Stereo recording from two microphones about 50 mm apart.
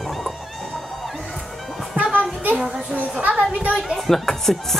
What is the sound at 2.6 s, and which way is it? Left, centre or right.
Speech, centre.